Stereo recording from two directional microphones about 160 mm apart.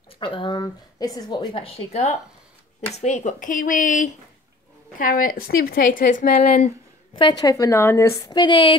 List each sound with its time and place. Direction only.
0.2 s speech: 30° left (ahead or behind); by 6.7 s 50° left (ahead or behind)
7.2 s a woman's voice: 25° left (ahead or behind)